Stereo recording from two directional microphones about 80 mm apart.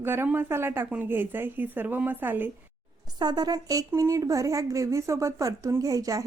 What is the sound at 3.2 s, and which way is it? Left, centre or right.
A woman's voice, right.